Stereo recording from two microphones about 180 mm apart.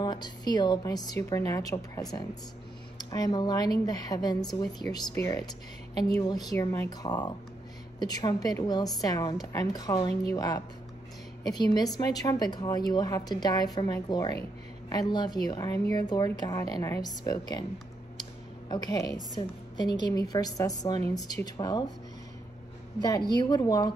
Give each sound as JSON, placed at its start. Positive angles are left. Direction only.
{"t": 0.0, "sound": "a woman's voice", "side_deg": 25}
{"t": 18.7, "sound": "a woman's voice", "side_deg": 25}
{"t": 23.0, "sound": "a woman's voice", "side_deg": 20}